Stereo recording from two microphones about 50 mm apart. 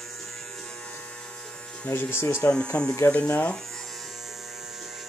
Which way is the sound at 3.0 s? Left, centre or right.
Left.